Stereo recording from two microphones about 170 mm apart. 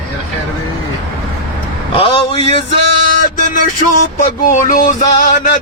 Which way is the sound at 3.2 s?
50° left (ahead or behind).